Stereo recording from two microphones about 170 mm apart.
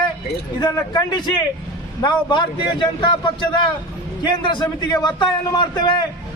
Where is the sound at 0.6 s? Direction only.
25° left (ahead or behind).